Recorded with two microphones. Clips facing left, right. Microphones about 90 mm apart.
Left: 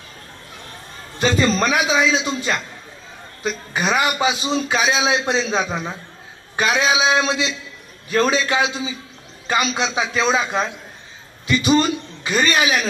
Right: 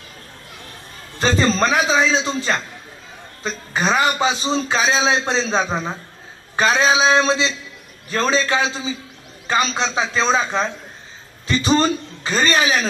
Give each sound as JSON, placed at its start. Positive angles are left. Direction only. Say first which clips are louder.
{"t": 1.1, "sound": "a man's voice", "louder": "even", "side_deg": -35}